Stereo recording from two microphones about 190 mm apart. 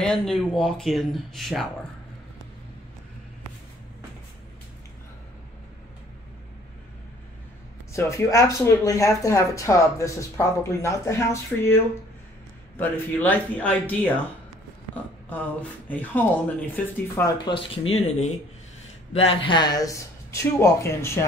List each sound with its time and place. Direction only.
0.0 s speech: 5° left (ahead or behind)
7.9 s speech: 15° left (ahead or behind)
15.9 s speech: 10° left (ahead or behind)
17.8 s speech: 35° left (ahead or behind); by 21.3 s 15° left (ahead or behind)